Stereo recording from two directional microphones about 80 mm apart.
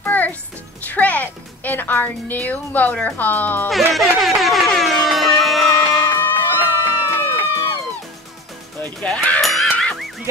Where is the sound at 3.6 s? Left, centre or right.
Centre.